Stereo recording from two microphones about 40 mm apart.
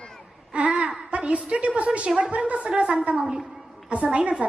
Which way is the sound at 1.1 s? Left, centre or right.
Right.